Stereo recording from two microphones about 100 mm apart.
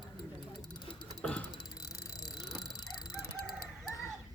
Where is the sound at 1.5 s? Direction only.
35° left (ahead or behind).